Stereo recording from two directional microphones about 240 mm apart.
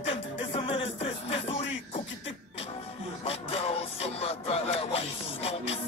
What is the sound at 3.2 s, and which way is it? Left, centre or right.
Music, left.